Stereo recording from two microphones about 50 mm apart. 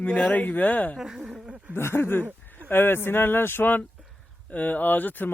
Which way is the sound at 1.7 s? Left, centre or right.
Left.